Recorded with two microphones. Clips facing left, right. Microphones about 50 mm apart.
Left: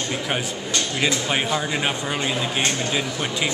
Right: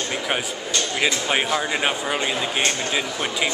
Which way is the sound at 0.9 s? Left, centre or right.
Centre.